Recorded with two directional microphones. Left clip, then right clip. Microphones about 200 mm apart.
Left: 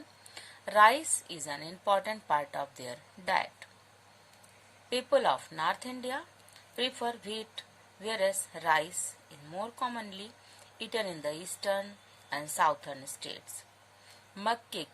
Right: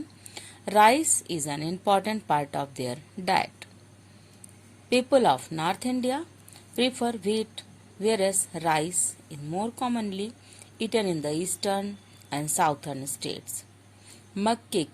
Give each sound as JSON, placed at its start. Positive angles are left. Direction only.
{"t": 0.3, "sound": "a woman's voice", "side_deg": -30}
{"t": 4.9, "sound": "a woman's voice", "side_deg": -30}